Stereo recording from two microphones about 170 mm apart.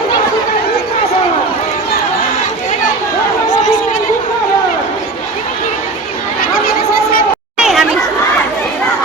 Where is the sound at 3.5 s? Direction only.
45° left (ahead or behind).